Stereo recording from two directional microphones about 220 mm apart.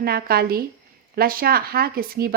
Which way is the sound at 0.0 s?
45° right (ahead or behind).